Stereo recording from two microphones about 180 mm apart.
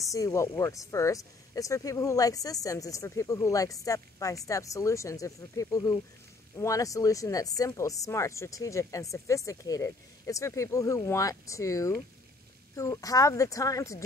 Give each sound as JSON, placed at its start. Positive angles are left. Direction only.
{"t": 0.1, "sound": "speech", "side_deg": 15}